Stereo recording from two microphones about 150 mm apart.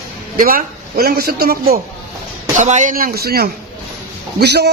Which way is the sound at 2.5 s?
55° right (ahead or behind).